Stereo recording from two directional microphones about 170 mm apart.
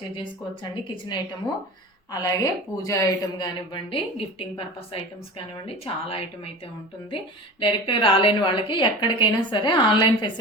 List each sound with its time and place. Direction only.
0.2 s a woman's voice: 25° left (ahead or behind)
2.1 s a woman's voice: 20° left (ahead or behind)
7.6 s a woman's voice: 30° left (ahead or behind)